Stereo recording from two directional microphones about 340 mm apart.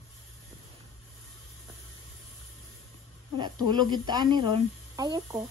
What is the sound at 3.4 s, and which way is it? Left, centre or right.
Speech, centre.